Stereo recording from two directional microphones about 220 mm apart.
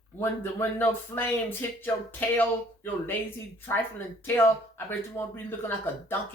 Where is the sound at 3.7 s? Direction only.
10° left (ahead or behind).